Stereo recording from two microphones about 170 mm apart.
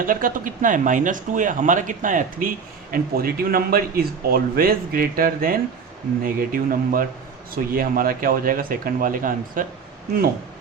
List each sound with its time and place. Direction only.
0.0 s speech: 55° right (ahead or behind)